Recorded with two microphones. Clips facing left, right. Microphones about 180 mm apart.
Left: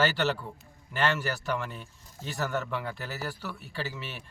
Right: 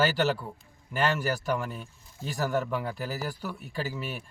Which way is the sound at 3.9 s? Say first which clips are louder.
Right 5 dB; 45° right (ahead or behind).